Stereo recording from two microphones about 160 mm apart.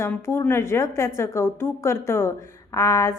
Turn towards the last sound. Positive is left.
turn(degrees=20)  # may be behind; listen again after turning